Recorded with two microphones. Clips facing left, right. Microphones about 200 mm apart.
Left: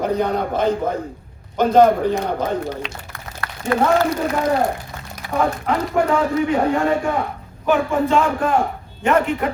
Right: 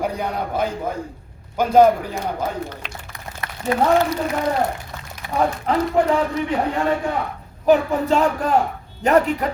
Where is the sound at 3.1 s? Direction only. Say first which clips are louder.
Left 1 dB; 20° right (ahead or behind).